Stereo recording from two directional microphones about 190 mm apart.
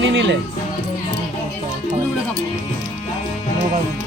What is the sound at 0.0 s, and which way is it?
Music, 80° right.